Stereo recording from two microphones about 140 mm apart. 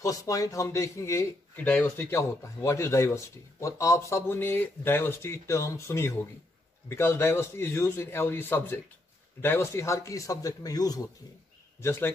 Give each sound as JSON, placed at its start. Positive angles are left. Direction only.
{"t": 0.0, "sound": "a man's voice", "side_deg": 25}